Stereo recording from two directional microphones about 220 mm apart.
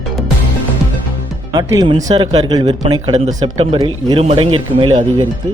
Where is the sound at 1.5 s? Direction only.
20° right (ahead or behind).